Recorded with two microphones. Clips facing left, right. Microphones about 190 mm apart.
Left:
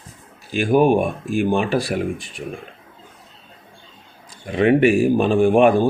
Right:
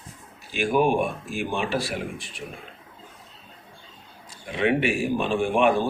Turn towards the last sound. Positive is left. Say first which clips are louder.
# left 8 dB
turn(degrees=45)  # may be behind; listen again after turning